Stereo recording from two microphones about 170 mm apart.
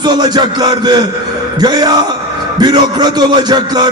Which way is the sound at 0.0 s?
25° right (ahead or behind).